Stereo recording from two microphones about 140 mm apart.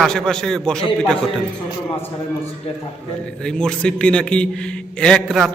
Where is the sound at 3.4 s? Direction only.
5° left (ahead or behind).